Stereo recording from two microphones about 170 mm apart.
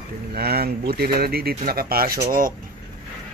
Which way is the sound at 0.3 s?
65° right (ahead or behind).